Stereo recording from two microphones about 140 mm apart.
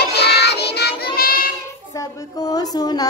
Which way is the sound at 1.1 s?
90° left.